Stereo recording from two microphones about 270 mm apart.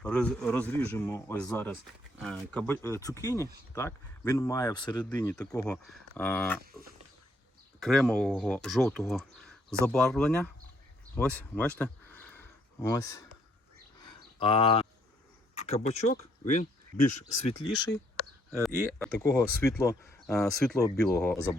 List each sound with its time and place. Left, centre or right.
0.0 s speech: centre
5.0 s speech: centre
7.8 s speech: centre
11.1 s a sound: centre
12.9 s speech: centre
14.0 s a sound: centre
15.5 s speech: left
17.3 s speech: left
18.5 s speech: centre